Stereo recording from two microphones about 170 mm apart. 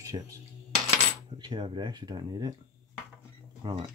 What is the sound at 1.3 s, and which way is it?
Speech, 30° right (ahead or behind).